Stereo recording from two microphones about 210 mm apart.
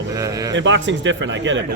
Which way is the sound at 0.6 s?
60° right (ahead or behind).